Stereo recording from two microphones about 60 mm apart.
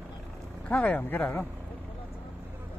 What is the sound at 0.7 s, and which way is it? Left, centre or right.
Speech, left.